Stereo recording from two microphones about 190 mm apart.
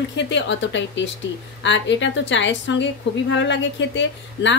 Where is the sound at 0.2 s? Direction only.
70° left (ahead or behind).